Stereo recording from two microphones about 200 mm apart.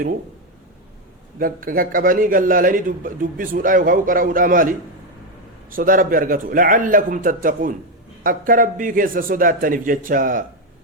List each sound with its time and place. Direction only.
1.4 s a man's voice: 45° right (ahead or behind)
5.7 s a man's voice: 45° right (ahead or behind)